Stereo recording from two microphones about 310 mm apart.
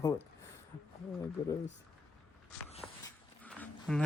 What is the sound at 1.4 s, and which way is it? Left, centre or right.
Speech, centre.